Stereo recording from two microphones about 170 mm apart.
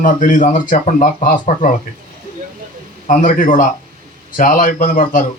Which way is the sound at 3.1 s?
50° left (ahead or behind).